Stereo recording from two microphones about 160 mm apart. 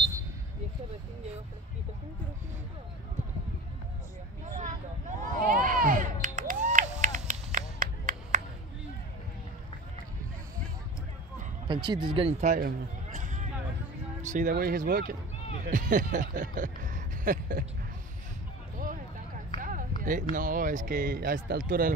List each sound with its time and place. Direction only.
5.3 s a sound: 55° right (ahead or behind)
11.6 s speech: 30° right (ahead or behind); by 17.6 s 55° right (ahead or behind)
18.8 s run: 55° right (ahead or behind)
20.0 s speech: 55° right (ahead or behind)